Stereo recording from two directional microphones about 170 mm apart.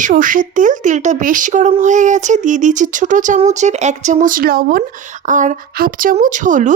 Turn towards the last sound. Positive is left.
turn(degrees=-50)  # may be behind; listen again after turning